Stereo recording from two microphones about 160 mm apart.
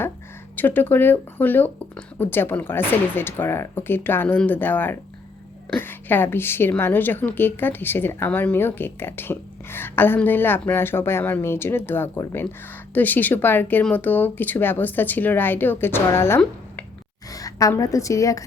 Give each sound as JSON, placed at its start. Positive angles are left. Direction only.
{"t": 0.5, "sound": "a woman's voice", "side_deg": 10}